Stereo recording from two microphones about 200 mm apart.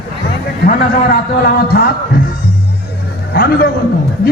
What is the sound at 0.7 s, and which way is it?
A man's voice, 50° left (ahead or behind).